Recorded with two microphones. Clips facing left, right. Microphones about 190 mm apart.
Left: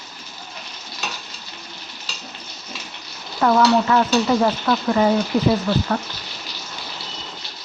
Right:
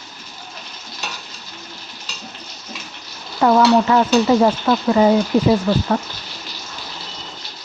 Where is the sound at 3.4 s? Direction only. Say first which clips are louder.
Right 3 dB; 25° right (ahead or behind).